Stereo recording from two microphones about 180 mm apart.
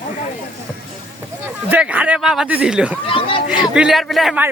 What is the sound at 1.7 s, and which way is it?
Speech, 5° right (ahead or behind).